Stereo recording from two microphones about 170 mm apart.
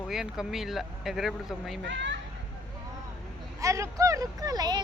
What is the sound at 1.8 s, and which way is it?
Speech, 90° right.